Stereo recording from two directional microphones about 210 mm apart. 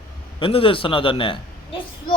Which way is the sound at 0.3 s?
25° left (ahead or behind).